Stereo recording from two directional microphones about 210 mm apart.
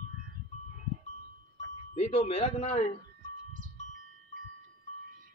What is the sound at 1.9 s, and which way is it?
Speech, 35° left (ahead or behind).